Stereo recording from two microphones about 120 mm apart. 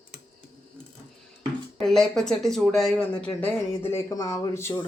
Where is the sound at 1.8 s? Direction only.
5° left (ahead or behind).